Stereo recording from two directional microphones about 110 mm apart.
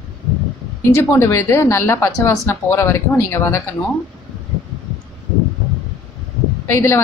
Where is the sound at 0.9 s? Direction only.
25° left (ahead or behind).